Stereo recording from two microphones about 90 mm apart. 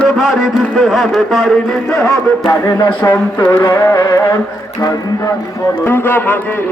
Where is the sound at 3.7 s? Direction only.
40° left (ahead or behind).